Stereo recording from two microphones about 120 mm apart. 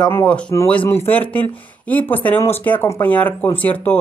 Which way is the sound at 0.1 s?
15° left (ahead or behind).